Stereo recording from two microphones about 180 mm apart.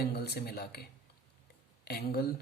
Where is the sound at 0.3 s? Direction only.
60° left (ahead or behind).